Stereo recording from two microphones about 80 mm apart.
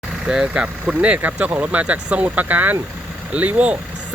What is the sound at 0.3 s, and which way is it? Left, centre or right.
Speech, centre.